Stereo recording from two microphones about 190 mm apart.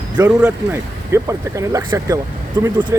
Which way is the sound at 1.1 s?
15° right (ahead or behind).